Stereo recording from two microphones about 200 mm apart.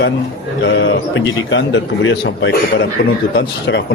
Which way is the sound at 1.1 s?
65° left (ahead or behind).